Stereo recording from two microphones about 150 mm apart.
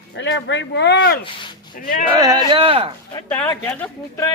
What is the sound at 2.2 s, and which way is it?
Speech, 25° right (ahead or behind).